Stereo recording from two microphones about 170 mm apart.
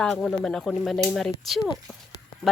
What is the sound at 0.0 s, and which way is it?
Speech, 5° left (ahead or behind).